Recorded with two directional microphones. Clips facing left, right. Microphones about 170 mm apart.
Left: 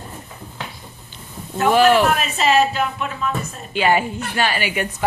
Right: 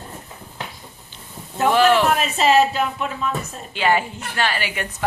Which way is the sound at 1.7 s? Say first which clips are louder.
Left 2 dB; 10° left (ahead or behind).